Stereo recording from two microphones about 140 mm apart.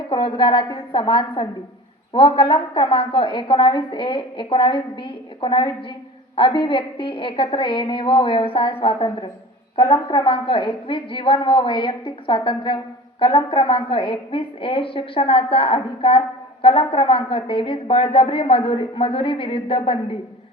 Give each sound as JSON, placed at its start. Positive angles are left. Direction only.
{"t": 0.1, "sound": "a woman's voice", "side_deg": 35}